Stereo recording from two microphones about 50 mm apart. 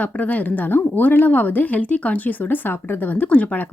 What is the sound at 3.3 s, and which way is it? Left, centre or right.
Speech, left.